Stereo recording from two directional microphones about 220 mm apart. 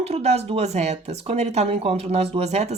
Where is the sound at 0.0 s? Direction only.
30° right (ahead or behind).